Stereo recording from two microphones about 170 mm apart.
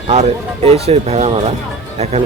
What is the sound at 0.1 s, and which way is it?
Speech, 35° right (ahead or behind).